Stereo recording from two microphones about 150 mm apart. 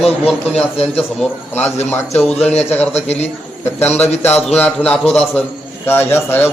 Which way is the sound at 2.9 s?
45° left (ahead or behind).